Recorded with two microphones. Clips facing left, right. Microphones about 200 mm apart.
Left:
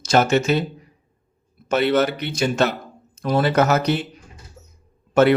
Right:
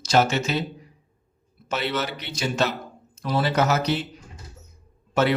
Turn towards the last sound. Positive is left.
turn(degrees=55)  # may be behind; listen again after turning